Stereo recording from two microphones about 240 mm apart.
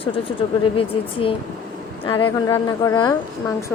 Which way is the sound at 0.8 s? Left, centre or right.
Left.